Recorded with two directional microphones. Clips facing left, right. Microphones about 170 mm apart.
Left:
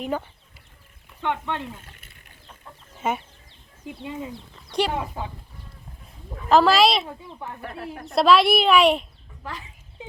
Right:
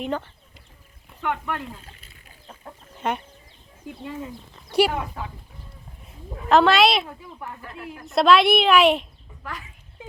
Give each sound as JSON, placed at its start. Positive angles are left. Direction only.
{"t": 0.0, "sound": "speech", "side_deg": 10}
{"t": 1.2, "sound": "speech", "side_deg": 25}
{"t": 2.9, "sound": "chicken", "side_deg": 5}
{"t": 3.8, "sound": "speech", "side_deg": 15}
{"t": 4.9, "sound": "speech", "side_deg": 30}
{"t": 6.5, "sound": "a child's voice", "side_deg": 0}
{"t": 7.0, "sound": "speech", "side_deg": 20}
{"t": 8.0, "sound": "a child's voice", "side_deg": 0}
{"t": 9.4, "sound": "speech", "side_deg": 25}